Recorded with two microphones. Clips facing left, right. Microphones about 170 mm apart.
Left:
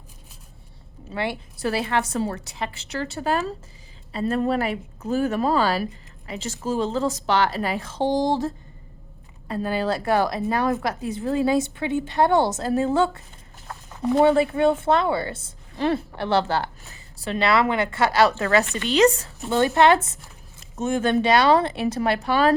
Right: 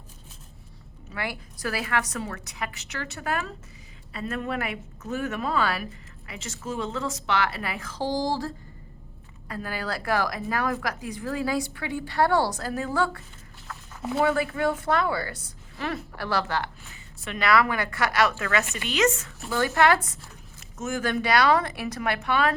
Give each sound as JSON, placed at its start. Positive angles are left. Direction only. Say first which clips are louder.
{"t": 1.1, "sound": "a woman's voice", "louder": "left 6 dB", "side_deg": 25}